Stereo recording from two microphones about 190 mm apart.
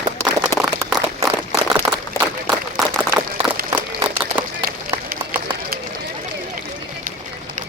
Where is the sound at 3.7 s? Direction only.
15° right (ahead or behind).